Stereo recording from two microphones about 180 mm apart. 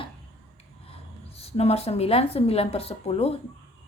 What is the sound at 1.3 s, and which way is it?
A woman's voice, 35° left (ahead or behind).